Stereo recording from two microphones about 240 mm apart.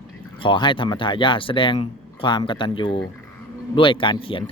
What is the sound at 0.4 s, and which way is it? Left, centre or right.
Speech, centre.